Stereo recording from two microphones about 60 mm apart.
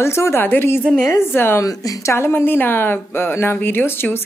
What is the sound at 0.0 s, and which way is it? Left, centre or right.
Speech, left.